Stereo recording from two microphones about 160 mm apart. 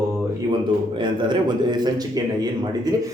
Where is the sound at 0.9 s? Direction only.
30° right (ahead or behind).